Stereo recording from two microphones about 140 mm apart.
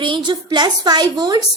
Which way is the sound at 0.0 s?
35° right (ahead or behind).